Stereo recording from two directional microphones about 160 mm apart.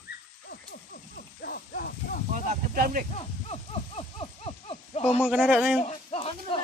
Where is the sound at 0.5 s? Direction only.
85° left.